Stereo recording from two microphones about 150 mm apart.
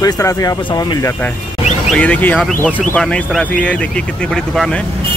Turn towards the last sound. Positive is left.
turn(degrees=0)  # may be behind; listen again after turning